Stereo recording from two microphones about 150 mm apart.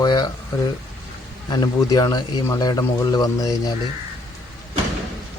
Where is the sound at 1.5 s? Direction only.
25° left (ahead or behind).